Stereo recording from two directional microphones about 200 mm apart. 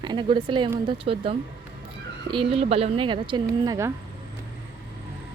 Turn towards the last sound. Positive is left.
turn(degrees=-20)  # may be behind; listen again after turning